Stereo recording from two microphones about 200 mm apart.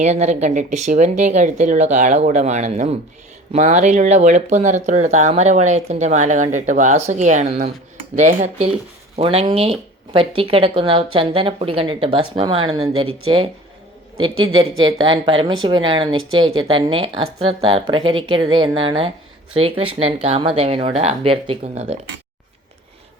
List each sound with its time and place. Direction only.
0.0 s speech: 35° right (ahead or behind)
14.3 s speech: 90° right
14.8 s speech: 25° right (ahead or behind)